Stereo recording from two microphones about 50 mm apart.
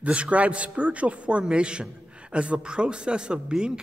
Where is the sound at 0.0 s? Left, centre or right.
Right.